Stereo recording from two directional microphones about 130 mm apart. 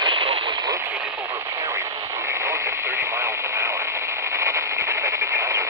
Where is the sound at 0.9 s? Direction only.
10° right (ahead or behind).